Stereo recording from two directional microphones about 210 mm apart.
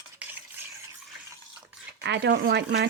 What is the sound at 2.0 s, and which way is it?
Speech, 55° right (ahead or behind).